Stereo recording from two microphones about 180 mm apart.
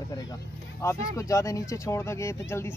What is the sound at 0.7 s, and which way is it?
Speech, 15° left (ahead or behind).